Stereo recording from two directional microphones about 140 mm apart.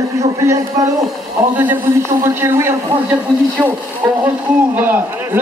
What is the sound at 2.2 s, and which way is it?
Speech, 15° right (ahead or behind).